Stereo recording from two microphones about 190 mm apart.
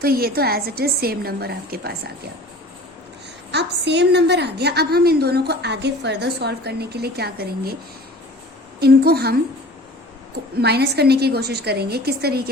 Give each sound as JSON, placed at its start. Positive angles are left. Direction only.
{"t": 0.0, "sound": "a woman's voice", "side_deg": -50}
{"t": 3.5, "sound": "a woman's voice", "side_deg": -65}
{"t": 8.8, "sound": "a woman's voice", "side_deg": -55}
{"t": 10.6, "sound": "a woman's voice", "side_deg": -60}